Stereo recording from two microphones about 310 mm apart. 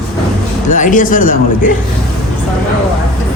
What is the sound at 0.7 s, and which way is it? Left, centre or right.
A man's voice, left.